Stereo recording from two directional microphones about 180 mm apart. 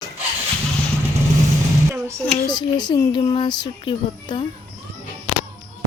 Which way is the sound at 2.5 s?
25° left (ahead or behind).